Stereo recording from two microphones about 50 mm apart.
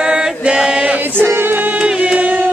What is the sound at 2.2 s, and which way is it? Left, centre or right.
Music, right.